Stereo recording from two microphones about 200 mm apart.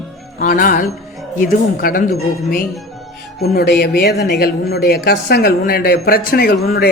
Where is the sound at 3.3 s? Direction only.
55° left (ahead or behind).